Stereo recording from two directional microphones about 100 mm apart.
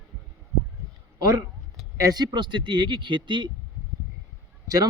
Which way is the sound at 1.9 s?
40° right (ahead or behind).